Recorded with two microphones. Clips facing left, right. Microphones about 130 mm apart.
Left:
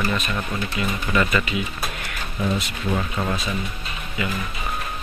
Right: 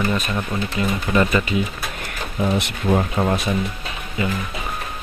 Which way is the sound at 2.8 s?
35° right (ahead or behind).